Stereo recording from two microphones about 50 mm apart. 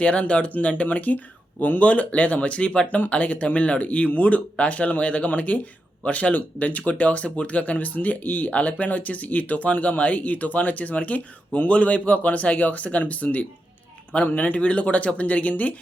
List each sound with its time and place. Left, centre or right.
0.0 s speech: left